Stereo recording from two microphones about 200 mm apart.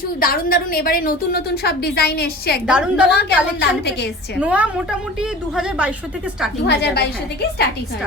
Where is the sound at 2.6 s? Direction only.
5° right (ahead or behind).